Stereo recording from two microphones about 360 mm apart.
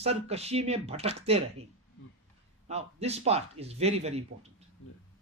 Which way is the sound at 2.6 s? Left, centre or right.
Centre.